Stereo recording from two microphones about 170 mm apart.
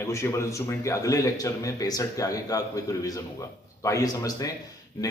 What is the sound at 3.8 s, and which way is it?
Speech, 20° left (ahead or behind).